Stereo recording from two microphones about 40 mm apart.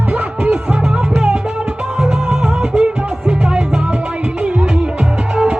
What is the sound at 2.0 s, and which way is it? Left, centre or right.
Music, centre.